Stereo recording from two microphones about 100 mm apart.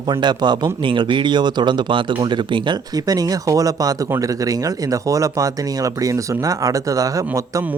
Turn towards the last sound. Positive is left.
turn(degrees=-35)  # may be behind; listen again after turning